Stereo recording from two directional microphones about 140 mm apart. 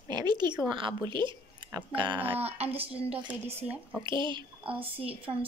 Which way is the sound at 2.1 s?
15° right (ahead or behind).